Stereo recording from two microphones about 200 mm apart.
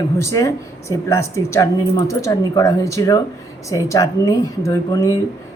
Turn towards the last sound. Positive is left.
turn(degrees=15)  # may be behind; listen again after turning